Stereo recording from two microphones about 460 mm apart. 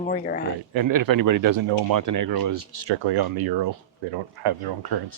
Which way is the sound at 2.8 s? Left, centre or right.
Right.